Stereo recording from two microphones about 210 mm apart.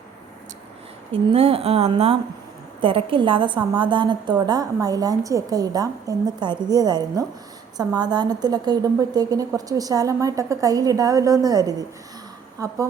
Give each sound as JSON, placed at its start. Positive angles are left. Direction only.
{"t": 1.3, "sound": "a woman's voice", "side_deg": -25}